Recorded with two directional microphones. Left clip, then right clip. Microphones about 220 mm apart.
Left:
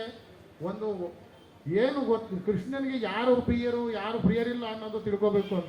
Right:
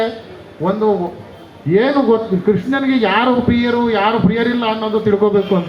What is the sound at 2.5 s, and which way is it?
A man's voice, 50° right (ahead or behind).